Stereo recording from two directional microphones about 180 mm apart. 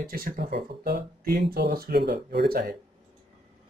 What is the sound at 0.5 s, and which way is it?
Speech, 70° right (ahead or behind).